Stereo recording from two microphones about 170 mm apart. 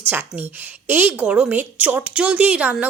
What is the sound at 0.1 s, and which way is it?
A woman's voice, 10° right (ahead or behind).